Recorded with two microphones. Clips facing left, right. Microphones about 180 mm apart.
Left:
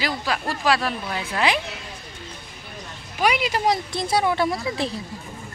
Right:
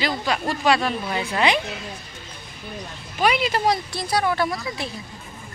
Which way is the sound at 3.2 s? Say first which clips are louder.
Right 1 dB; 10° left (ahead or behind).